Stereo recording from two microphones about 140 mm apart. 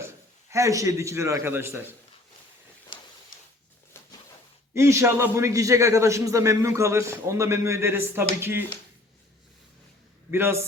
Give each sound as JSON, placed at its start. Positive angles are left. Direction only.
{"t": 0.5, "sound": "a man's voice", "side_deg": -20}
{"t": 2.9, "sound": "a sound", "side_deg": 35}
{"t": 4.7, "sound": "a man's voice", "side_deg": -20}
{"t": 10.3, "sound": "a man's voice", "side_deg": -15}